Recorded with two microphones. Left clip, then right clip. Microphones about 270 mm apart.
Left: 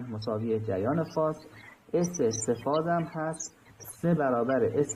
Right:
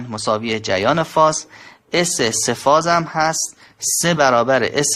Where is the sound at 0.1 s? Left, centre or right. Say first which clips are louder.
Right 11 dB; right.